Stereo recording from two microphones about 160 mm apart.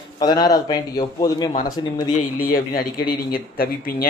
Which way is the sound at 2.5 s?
65° left (ahead or behind).